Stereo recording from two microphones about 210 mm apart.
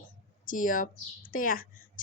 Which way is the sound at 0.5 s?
40° left (ahead or behind).